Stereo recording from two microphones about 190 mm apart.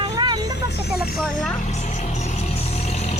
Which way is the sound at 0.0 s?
20° right (ahead or behind).